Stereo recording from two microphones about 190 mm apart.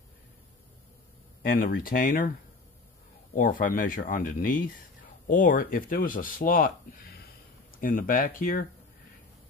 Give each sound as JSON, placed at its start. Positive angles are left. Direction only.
{"t": 1.5, "sound": "speech", "side_deg": 45}
{"t": 3.3, "sound": "speech", "side_deg": 45}